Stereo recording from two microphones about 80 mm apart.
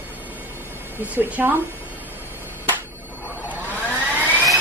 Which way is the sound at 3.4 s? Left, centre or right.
Right.